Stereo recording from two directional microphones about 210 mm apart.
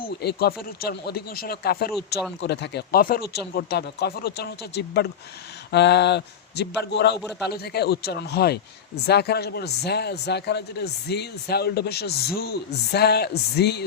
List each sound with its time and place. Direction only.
0.2 s a man's voice: 50° left (ahead or behind)